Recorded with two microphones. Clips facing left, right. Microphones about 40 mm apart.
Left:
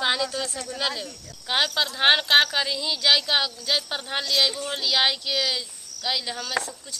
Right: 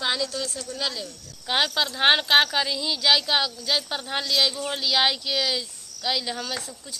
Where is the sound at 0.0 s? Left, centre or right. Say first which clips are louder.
Left 2 dB; centre.